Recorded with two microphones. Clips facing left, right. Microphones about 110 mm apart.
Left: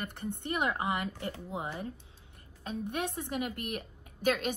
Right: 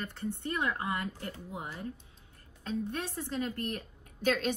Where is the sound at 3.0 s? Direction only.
60° left (ahead or behind).